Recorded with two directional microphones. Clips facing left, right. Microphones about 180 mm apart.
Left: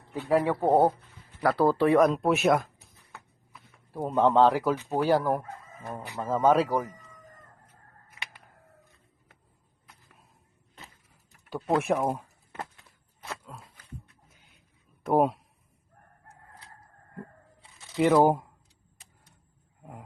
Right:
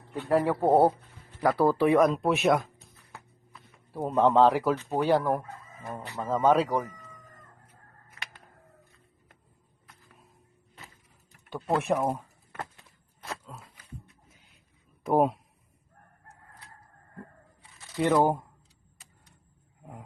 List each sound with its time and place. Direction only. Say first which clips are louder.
0.1 s speech: even; centre (ahead or behind)
3.1 s a sound: even; centre (ahead or behind)
4.9 s speech: left 1 dB; 5° left (ahead or behind)
11.4 s speech: left 1 dB; 5° left (ahead or behind)
13.2 s a sound: right 1 dB; centre (ahead or behind)
15.0 s speech: even; centre (ahead or behind)
17.9 s speech: left 3 dB; 5° left (ahead or behind)